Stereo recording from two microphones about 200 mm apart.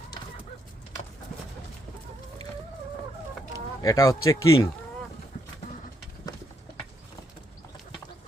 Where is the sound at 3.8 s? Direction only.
15° left (ahead or behind).